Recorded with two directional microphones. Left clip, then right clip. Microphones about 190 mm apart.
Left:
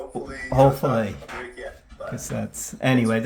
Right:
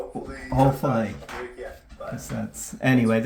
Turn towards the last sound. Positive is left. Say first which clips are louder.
# even
turn(degrees=10)  # may be behind; listen again after turning